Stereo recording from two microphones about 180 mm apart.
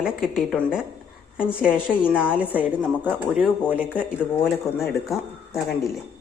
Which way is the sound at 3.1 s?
5° left (ahead or behind).